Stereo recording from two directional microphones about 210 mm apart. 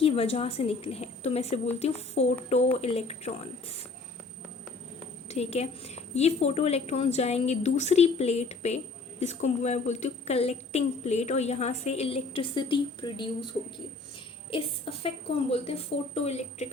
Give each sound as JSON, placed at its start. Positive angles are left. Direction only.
{"t": 0.0, "sound": "a woman's voice", "side_deg": 30}
{"t": 5.3, "sound": "a woman's voice", "side_deg": 30}